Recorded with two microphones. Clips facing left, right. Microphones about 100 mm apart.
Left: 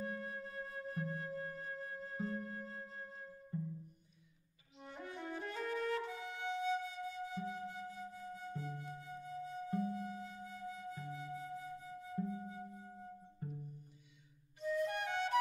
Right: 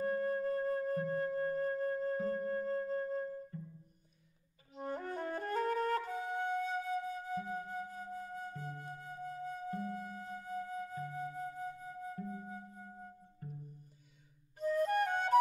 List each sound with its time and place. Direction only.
0.0 s flute: 45° right (ahead or behind)
3.5 s music: 20° left (ahead or behind)
4.7 s flute: 45° right (ahead or behind)
12.3 s music: 45° right (ahead or behind)
13.4 s music: 20° left (ahead or behind)
14.6 s flute: 45° right (ahead or behind)